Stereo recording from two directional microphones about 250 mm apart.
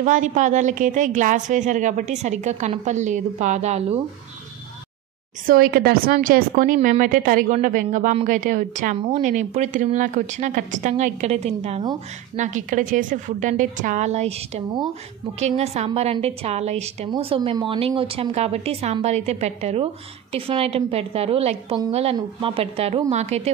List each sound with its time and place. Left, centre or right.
0.0 s a woman's voice: right
5.5 s a woman's voice: right